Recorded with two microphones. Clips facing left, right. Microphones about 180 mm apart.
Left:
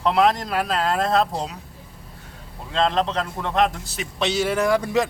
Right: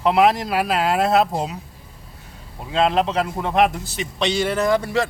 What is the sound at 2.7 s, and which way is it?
A man's voice, 10° right (ahead or behind).